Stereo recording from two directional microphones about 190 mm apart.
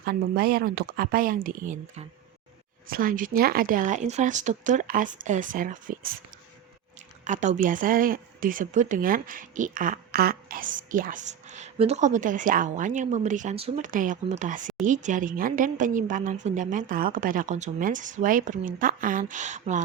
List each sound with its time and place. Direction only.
0.0 s a woman's voice: 50° right (ahead or behind)
7.3 s a woman's voice: 40° right (ahead or behind)